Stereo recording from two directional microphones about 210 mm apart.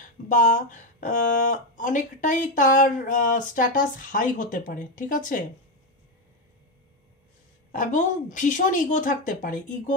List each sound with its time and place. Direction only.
0.3 s speech: 40° left (ahead or behind)
7.7 s speech: 35° left (ahead or behind)